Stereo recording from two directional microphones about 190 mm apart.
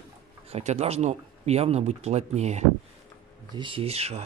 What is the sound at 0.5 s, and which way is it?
Speech, 35° right (ahead or behind).